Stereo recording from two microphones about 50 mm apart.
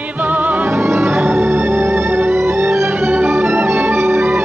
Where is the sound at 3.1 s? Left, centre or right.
Right.